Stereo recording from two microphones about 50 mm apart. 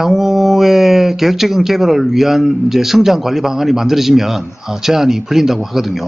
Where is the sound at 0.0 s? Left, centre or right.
Centre.